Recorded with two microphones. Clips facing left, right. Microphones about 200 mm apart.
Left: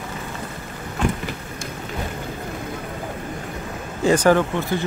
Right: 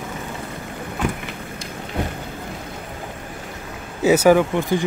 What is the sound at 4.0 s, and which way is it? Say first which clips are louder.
Speech: right 2 dB; 5° right (ahead or behind).